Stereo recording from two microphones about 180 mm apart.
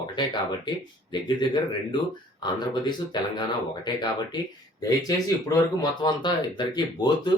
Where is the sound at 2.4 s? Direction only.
25° left (ahead or behind).